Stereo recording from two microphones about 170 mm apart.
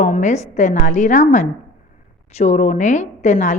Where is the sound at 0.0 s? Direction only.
45° left (ahead or behind).